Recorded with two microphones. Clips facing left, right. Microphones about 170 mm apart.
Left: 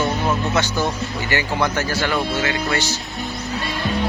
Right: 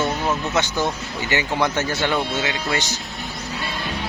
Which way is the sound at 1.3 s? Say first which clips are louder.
Even; 20° right (ahead or behind).